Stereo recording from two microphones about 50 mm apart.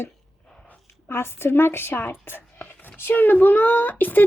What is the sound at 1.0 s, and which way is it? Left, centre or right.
A woman's voice, left.